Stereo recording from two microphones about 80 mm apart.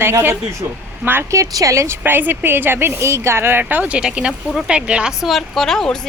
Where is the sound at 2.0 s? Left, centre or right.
Right.